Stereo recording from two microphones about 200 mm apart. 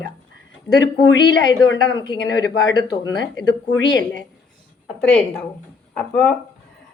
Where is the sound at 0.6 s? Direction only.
20° left (ahead or behind).